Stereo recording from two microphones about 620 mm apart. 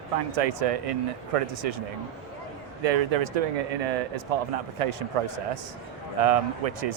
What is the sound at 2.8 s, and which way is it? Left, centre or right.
Speech, right.